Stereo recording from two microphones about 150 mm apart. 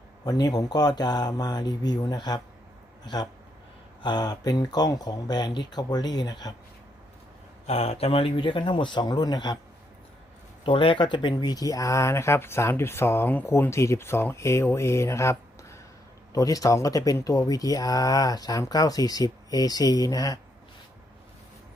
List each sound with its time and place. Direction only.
0.3 s speech: 25° left (ahead or behind)
7.7 s speech: 40° left (ahead or behind)
10.7 s speech: 35° left (ahead or behind)